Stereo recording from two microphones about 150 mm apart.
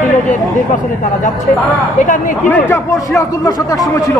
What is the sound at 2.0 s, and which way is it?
Speech, 60° left (ahead or behind).